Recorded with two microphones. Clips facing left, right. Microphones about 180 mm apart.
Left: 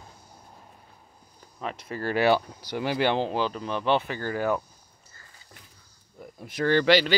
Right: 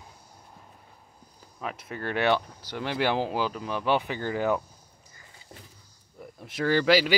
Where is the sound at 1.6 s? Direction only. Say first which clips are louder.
Left 2 dB; 5° right (ahead or behind).